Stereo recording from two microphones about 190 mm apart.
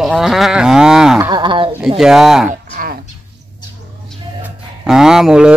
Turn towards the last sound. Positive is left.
turn(degrees=-5)  # may be behind; listen again after turning